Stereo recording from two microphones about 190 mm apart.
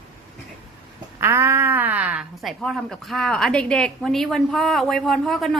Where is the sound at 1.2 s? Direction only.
15° right (ahead or behind).